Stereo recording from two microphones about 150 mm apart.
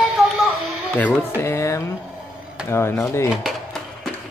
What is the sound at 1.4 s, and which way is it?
Music, 20° left (ahead or behind).